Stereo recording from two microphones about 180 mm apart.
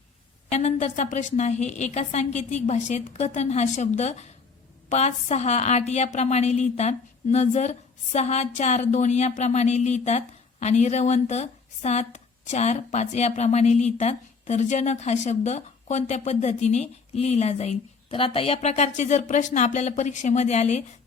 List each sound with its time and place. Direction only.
0.5 s a woman's voice: 40° left (ahead or behind)